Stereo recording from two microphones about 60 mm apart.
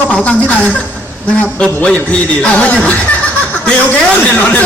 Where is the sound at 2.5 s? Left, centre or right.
Left.